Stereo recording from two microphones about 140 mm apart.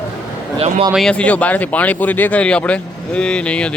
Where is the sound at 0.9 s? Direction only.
5° left (ahead or behind).